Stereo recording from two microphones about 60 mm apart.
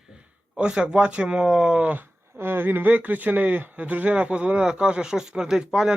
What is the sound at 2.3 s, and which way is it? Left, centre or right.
Speech, right.